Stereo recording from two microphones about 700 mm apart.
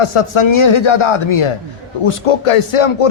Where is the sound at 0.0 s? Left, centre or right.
Left.